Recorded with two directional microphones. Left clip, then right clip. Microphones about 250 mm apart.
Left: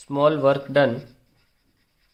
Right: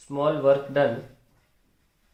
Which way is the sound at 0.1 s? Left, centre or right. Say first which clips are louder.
Left 3 dB; left.